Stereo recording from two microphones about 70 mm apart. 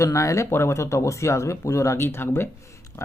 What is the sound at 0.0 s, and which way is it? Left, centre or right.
Speech, left.